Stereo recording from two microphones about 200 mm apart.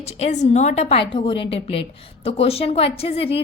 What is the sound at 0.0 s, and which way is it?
A woman's voice, 35° left (ahead or behind).